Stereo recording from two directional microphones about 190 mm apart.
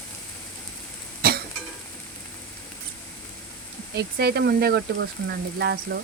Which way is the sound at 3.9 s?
55° right (ahead or behind).